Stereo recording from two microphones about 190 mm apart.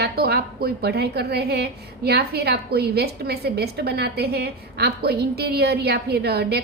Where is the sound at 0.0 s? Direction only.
60° right (ahead or behind).